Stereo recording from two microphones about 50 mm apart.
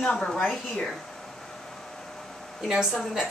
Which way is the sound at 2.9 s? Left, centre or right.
Centre.